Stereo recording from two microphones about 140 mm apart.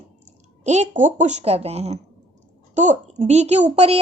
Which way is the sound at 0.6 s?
55° right (ahead or behind).